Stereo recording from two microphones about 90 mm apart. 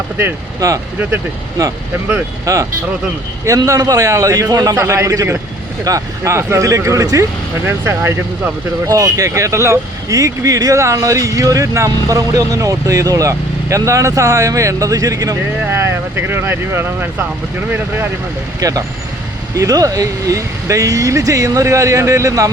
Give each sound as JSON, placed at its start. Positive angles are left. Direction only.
{"t": 0.6, "sound": "speech", "side_deg": -40}
{"t": 2.5, "sound": "speech", "side_deg": -35}
{"t": 8.9, "sound": "speech", "side_deg": -40}
{"t": 15.6, "sound": "speech", "side_deg": -30}
{"t": 18.6, "sound": "speech", "side_deg": -40}